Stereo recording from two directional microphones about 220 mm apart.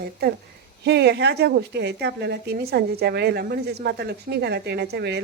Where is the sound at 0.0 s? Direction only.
45° right (ahead or behind).